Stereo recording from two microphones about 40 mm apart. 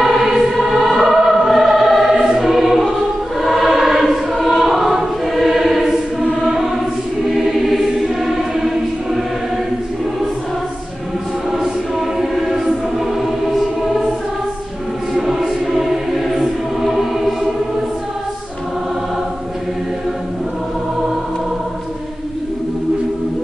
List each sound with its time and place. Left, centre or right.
0.0 s choir: centre
2.2 s music: centre
2.9 s choir: centre
6.4 s music: centre
7.2 s choir: centre
12.2 s choir: centre
15.1 s choir: centre
16.3 s music: centre